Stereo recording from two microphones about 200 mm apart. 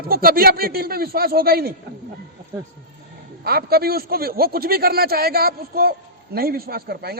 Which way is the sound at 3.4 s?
50° right (ahead or behind).